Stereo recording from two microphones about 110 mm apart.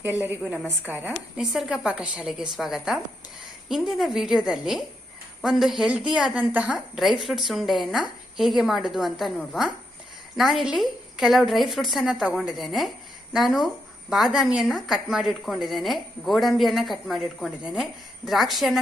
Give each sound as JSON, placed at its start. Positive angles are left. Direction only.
{"t": 0.0, "sound": "a woman's voice", "side_deg": -20}
{"t": 1.5, "sound": "a woman's voice", "side_deg": -5}